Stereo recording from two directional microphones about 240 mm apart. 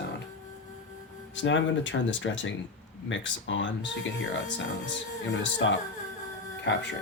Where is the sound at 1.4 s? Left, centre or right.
Left.